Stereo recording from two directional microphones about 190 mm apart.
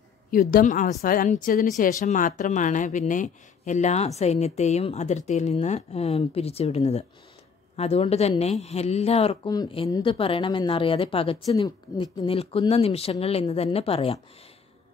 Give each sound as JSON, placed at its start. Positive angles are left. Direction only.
{"t": 0.3, "sound": "a woman's voice", "side_deg": 50}